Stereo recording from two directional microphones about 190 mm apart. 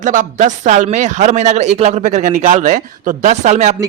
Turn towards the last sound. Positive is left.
turn(degrees=-40)  # may be behind; listen again after turning